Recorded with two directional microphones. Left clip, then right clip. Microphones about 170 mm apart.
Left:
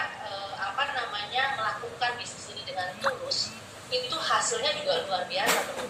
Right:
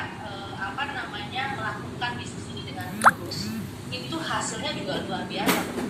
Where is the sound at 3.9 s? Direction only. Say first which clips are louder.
Left 4 dB; 30° left (ahead or behind).